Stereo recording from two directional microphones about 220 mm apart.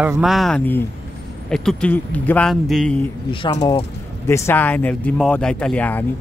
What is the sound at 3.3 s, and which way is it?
A man's voice, 20° left (ahead or behind).